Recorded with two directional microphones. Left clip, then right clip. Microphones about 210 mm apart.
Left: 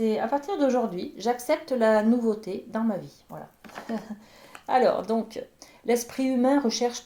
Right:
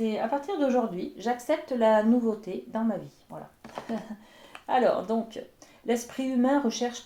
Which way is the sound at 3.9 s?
30° left (ahead or behind).